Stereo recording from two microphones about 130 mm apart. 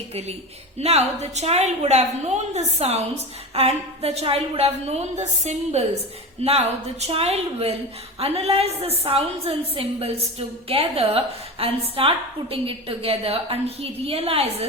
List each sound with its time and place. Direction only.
0.1 s a woman's voice: 55° right (ahead or behind)